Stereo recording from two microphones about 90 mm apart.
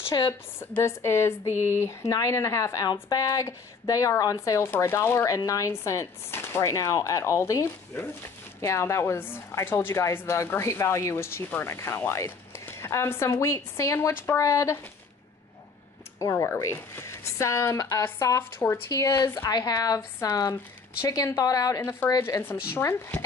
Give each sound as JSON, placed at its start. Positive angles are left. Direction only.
{"t": 0.3, "sound": "speech", "side_deg": 30}
{"t": 16.2, "sound": "speech", "side_deg": 40}
{"t": 16.4, "sound": "a woman's voice", "side_deg": 25}
{"t": 22.8, "sound": "speech", "side_deg": 25}